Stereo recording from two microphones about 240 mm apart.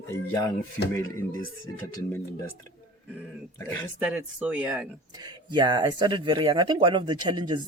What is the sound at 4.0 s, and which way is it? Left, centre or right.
Speech, centre.